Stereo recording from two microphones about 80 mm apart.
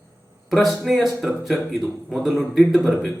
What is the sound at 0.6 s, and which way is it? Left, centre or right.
A man's voice, centre.